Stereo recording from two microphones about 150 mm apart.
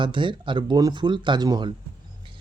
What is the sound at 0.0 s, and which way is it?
Speech, 35° right (ahead or behind).